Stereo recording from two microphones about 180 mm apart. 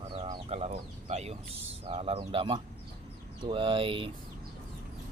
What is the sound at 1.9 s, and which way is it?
A man's voice, 30° right (ahead or behind).